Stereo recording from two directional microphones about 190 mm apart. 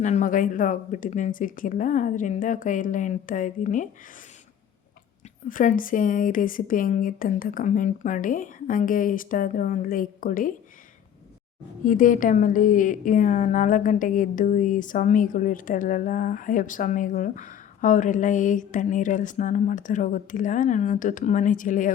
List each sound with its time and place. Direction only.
0.0 s a woman's voice: 40° left (ahead or behind)
5.5 s a woman's voice: 45° left (ahead or behind)
11.9 s a woman's voice: 45° left (ahead or behind)